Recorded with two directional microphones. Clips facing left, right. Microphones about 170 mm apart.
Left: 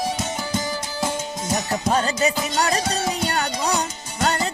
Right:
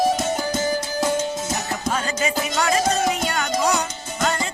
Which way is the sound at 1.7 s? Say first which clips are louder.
Left 6 dB; 35° left (ahead or behind).